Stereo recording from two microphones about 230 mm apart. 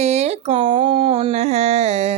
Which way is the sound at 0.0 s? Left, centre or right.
Right.